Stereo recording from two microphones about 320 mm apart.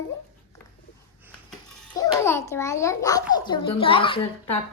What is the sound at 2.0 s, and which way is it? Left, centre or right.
A child's voice, centre.